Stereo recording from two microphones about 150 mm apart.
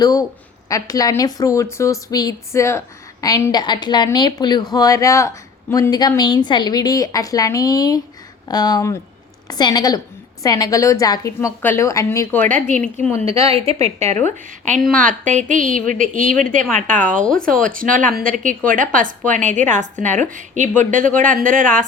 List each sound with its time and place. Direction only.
0.0 s a woman's voice: 25° left (ahead or behind)
13.5 s a woman's voice: 40° right (ahead or behind); by 21.8 s 60° right (ahead or behind)